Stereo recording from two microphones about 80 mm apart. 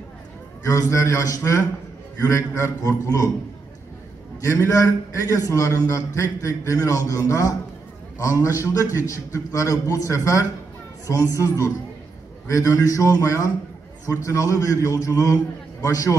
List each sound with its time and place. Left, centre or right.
0.7 s a man's voice: left
4.4 s a man's voice: left